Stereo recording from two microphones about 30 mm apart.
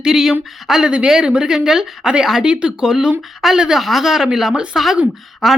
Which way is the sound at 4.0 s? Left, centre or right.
Centre.